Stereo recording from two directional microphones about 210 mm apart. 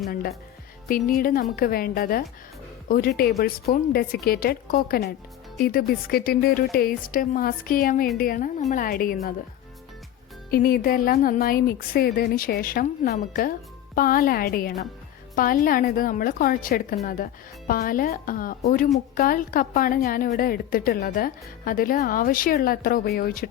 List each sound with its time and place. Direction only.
0.1 s a woman's voice: 45° left (ahead or behind)
3.3 s a woman's voice: 35° left (ahead or behind)
10.5 s a woman's voice: 45° left (ahead or behind)